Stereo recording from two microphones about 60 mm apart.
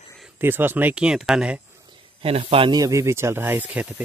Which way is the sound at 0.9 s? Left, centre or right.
Centre.